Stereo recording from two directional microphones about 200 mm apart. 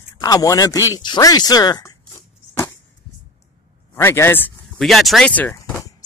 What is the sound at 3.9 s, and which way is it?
Speech, 10° left (ahead or behind).